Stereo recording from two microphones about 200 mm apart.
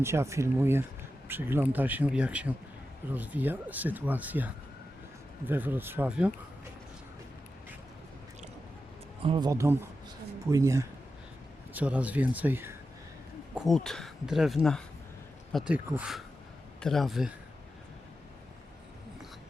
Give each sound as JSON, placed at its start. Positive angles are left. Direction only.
{"t": 0.0, "sound": "speech", "side_deg": -15}
{"t": 9.2, "sound": "speech", "side_deg": -25}
{"t": 13.6, "sound": "speech", "side_deg": 0}